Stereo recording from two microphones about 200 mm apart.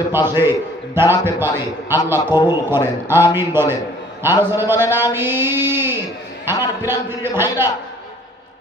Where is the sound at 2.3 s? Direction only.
20° left (ahead or behind).